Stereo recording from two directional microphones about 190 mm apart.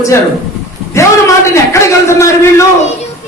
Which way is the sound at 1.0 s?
15° left (ahead or behind).